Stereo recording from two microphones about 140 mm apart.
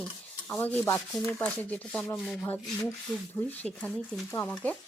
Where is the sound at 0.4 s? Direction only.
10° left (ahead or behind).